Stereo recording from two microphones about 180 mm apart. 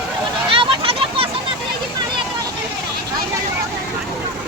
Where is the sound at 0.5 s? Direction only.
30° right (ahead or behind).